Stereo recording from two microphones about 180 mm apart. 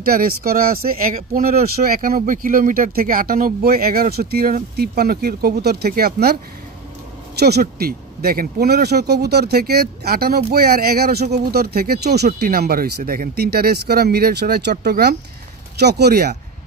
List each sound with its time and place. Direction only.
0.0 s speech: 55° right (ahead or behind)
7.3 s speech: 65° right (ahead or behind)